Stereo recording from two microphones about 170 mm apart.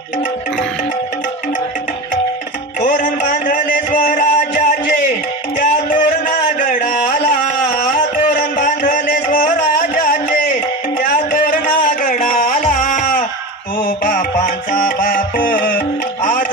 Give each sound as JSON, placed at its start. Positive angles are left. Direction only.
{"t": 2.8, "sound": "music", "side_deg": 50}